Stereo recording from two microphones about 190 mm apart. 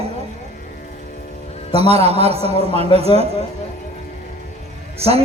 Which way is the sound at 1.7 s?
30° right (ahead or behind).